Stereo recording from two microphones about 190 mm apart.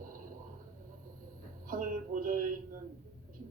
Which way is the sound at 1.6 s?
50° right (ahead or behind).